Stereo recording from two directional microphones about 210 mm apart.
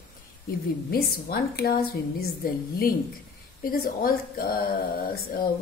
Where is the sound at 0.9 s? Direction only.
45° left (ahead or behind).